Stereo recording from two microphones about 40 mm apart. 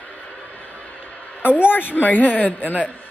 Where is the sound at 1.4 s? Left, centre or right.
Left.